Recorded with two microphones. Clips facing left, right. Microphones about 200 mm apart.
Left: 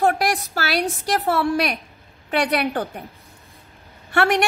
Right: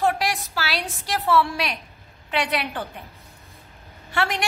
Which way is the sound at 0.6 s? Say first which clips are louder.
Left 6 dB; 50° left (ahead or behind).